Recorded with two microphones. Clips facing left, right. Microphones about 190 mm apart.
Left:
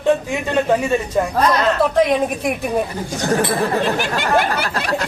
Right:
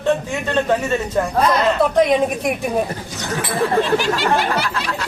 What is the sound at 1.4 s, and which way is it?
A man's voice, 5° right (ahead or behind).